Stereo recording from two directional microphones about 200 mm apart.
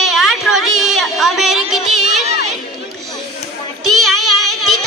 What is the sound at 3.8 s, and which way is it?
Child singing, 90° right.